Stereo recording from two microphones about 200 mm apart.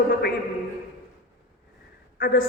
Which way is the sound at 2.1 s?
50° left (ahead or behind).